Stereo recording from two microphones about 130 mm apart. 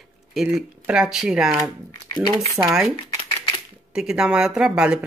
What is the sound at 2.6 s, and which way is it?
Speech, 20° right (ahead or behind).